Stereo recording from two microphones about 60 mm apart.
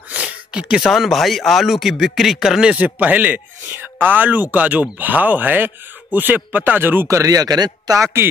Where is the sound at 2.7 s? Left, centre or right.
Right.